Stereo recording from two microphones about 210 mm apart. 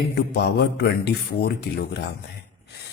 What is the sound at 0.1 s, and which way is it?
A man's voice, 50° left (ahead or behind).